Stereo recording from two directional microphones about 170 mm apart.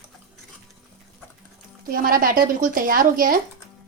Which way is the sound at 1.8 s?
55° right (ahead or behind).